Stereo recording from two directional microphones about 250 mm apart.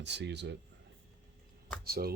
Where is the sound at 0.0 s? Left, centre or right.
Right.